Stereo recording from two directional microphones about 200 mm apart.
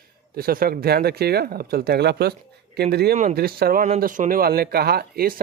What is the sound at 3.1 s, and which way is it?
Speech, 40° right (ahead or behind).